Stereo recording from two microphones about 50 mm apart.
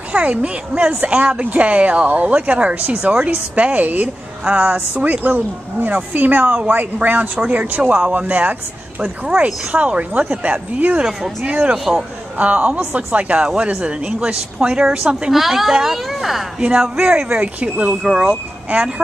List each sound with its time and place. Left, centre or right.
0.1 s speech: right
11.7 s speech: centre
12.4 s speech: right
15.3 s a woman's voice: centre
16.5 s speech: centre
18.0 s speech: centre
18.3 s speech: right